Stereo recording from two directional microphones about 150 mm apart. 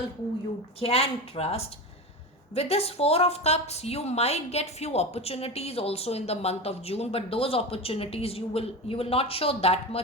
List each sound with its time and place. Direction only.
0.8 s a woman's voice: 40° left (ahead or behind)